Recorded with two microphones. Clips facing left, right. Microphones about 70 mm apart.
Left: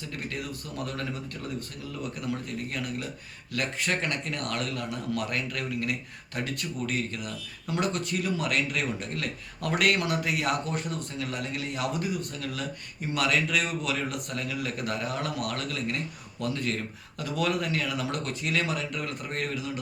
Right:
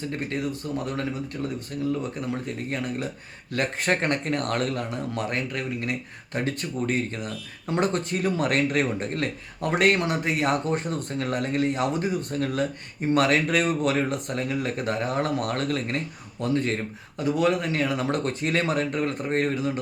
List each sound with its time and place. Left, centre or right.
0.1 s speech: right
2.1 s speech: right